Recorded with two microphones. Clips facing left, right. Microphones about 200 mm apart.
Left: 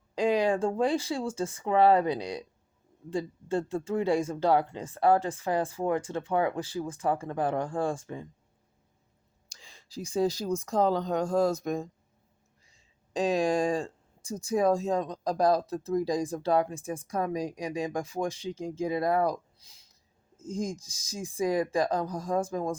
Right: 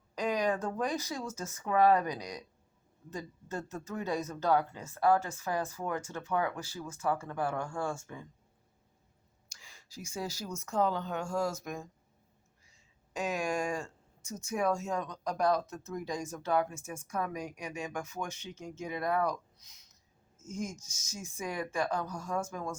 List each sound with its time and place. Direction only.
0.2 s speech: 30° left (ahead or behind)
7.2 s speech: 20° left (ahead or behind)
9.5 s a sound: 35° left (ahead or behind)
10.7 s speech: 35° left (ahead or behind)